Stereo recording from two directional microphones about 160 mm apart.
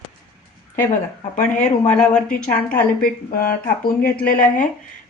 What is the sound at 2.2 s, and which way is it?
A woman's voice, 60° left (ahead or behind).